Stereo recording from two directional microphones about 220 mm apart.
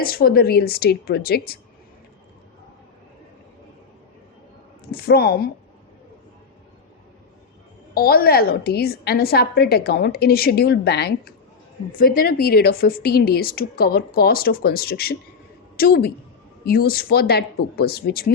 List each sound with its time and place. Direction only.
0.0 s a woman's voice: 45° left (ahead or behind)
4.9 s a woman's voice: 45° left (ahead or behind)
7.9 s a woman's voice: 45° left (ahead or behind)